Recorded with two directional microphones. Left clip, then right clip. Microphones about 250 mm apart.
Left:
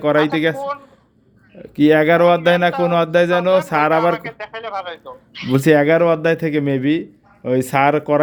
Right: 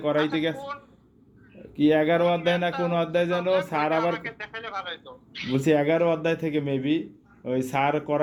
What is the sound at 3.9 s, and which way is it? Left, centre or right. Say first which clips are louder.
A man's voice: left 9 dB; left.